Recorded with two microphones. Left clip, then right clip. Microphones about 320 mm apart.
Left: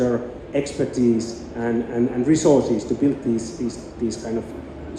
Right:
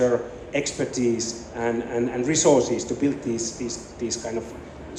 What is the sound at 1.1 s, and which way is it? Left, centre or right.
A man's voice, centre.